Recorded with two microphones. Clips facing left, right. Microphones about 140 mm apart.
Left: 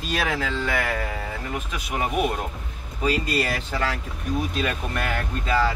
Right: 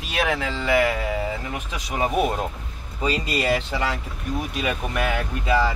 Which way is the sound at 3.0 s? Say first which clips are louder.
Left 1 dB; 20° right (ahead or behind).